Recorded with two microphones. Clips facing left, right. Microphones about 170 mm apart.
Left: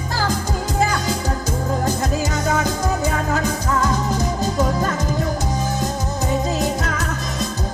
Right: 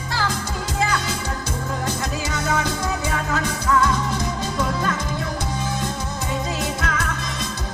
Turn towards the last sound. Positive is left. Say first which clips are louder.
# left 4 dB
turn(degrees=40)  # may be behind; listen again after turning